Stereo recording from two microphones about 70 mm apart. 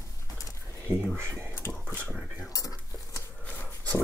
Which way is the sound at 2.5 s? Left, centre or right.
Left.